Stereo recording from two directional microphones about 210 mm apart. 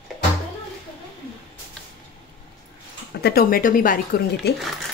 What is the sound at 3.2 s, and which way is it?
Speech, 45° left (ahead or behind).